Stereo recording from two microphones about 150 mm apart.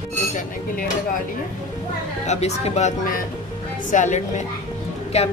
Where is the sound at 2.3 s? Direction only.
45° left (ahead or behind).